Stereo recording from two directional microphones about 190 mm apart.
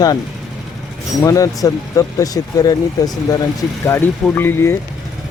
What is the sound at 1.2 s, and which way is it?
Speech, 15° left (ahead or behind).